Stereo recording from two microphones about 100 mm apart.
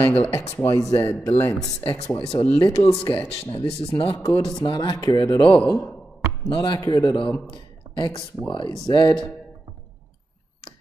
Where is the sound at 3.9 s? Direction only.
60° left (ahead or behind).